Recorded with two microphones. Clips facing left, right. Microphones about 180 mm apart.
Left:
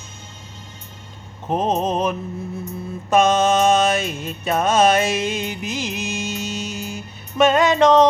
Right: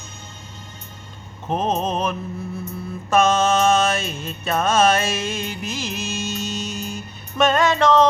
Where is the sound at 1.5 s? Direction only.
15° left (ahead or behind).